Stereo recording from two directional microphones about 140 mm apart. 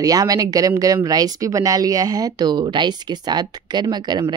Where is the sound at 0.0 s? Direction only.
25° right (ahead or behind).